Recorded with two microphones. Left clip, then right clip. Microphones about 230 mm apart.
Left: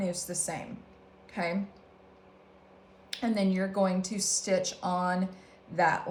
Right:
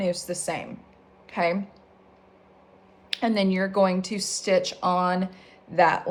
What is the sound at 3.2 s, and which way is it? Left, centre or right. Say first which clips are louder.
Speech: right 6 dB; right.